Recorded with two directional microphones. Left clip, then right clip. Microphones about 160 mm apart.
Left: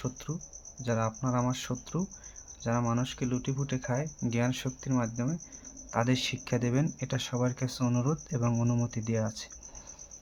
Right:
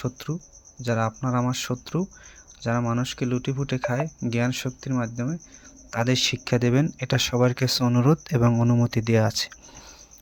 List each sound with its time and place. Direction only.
0.0 s speech: 35° right (ahead or behind)
8.5 s speech: 30° right (ahead or behind)
8.9 s speech: 45° right (ahead or behind)